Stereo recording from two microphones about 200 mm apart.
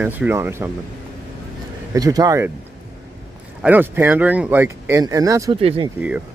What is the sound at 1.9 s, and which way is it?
Speech, 20° right (ahead or behind).